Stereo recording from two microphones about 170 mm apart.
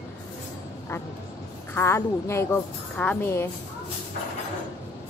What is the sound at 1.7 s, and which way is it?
A woman's voice, 15° left (ahead or behind).